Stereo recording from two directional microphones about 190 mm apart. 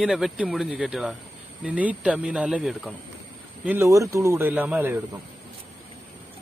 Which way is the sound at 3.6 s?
15° right (ahead or behind).